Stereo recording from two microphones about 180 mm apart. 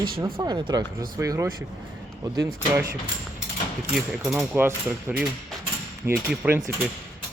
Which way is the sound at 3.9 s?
5° right (ahead or behind).